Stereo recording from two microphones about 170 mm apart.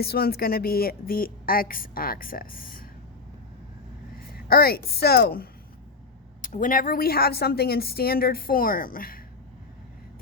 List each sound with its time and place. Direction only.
0.0 s speech: 65° left (ahead or behind)
4.4 s speech: 65° left (ahead or behind)
6.4 s speech: 50° left (ahead or behind)